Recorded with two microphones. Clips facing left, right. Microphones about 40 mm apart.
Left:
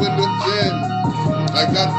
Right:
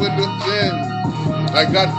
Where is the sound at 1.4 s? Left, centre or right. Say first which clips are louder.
Right 5 dB; right.